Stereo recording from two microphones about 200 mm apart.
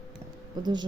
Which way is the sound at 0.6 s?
20° right (ahead or behind).